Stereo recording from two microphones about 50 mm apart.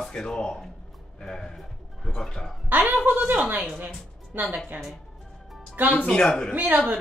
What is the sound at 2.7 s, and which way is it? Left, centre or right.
Speech, right.